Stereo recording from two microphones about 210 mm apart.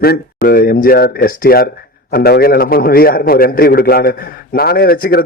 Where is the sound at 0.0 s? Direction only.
45° left (ahead or behind).